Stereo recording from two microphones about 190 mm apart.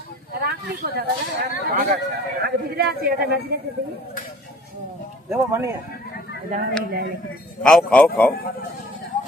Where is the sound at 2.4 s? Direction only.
55° right (ahead or behind).